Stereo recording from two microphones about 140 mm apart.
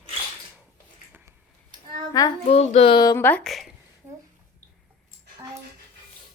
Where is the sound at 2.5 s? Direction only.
50° left (ahead or behind).